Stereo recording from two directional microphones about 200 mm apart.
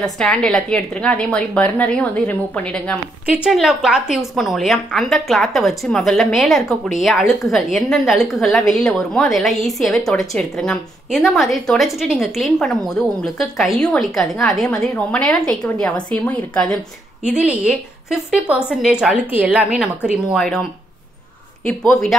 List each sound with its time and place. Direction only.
0.0 s a woman's voice: 5° left (ahead or behind)
3.3 s a woman's voice: 5° right (ahead or behind)
17.3 s a woman's voice: 5° right (ahead or behind)